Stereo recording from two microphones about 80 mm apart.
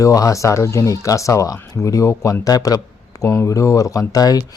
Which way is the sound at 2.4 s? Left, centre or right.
Left.